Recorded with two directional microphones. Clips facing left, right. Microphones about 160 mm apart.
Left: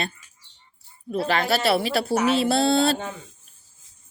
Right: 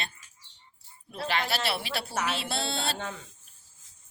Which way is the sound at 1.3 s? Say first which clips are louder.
Left 8 dB; 45° left (ahead or behind).